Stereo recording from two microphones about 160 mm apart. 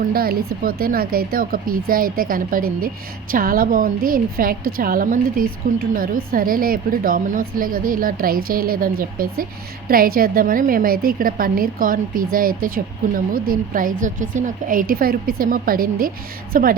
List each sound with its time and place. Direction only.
0.0 s a woman's voice: 65° right (ahead or behind)